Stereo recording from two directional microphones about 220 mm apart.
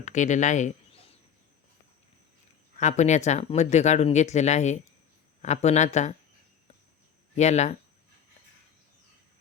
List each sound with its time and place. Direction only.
0.0 s speech: 35° left (ahead or behind)
2.7 s speech: 35° left (ahead or behind)
7.3 s speech: 30° left (ahead or behind)